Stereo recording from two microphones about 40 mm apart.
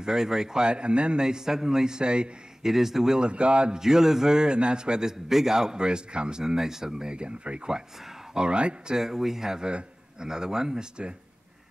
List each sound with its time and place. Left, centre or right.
0.0 s speech: centre
2.6 s speech: centre
3.2 s a man's voice: right
3.8 s a man's voice: centre
8.9 s speech: centre